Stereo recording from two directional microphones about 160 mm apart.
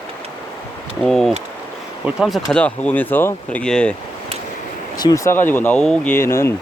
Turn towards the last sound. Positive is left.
turn(degrees=15)  # may be behind; listen again after turning